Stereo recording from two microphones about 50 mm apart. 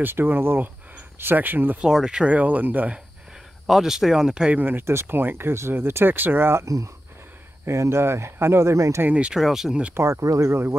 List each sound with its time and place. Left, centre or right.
0.0 s speech: right
1.9 s speech: centre
2.2 s speech: right
3.6 s speech: centre
4.8 s speech: right
7.6 s speech: right
9.3 s speech: centre
10.2 s speech: right
10.5 s speech: right